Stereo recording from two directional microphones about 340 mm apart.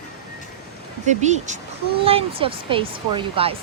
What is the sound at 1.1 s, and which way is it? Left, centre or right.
Speech, right.